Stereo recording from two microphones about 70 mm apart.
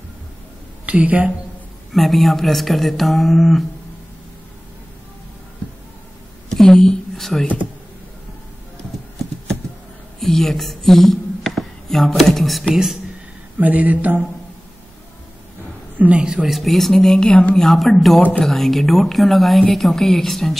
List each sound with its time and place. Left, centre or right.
0.8 s a woman's voice: right
1.9 s speech: centre
6.5 s a sound: centre
10.2 s a woman's voice: centre
13.6 s a sound: right
16.0 s a woman's voice: centre
16.4 s speech: centre
17.6 s speech: centre